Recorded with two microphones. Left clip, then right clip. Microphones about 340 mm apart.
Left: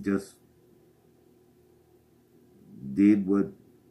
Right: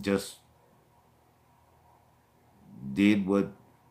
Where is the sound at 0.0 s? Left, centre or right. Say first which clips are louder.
Right 1 dB; centre.